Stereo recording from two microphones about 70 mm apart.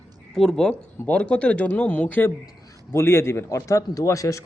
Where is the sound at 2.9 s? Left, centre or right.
Left.